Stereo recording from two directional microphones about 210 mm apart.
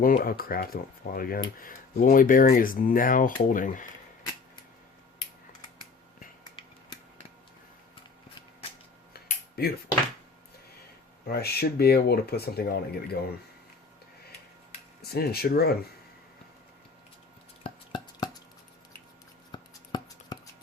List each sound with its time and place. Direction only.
0.0 s speech: 45° left (ahead or behind)
9.6 s speech: 50° left (ahead or behind)
11.3 s speech: 50° left (ahead or behind)
15.1 s speech: 50° left (ahead or behind)
17.6 s a sound: 25° left (ahead or behind)
19.5 s writing: 20° left (ahead or behind)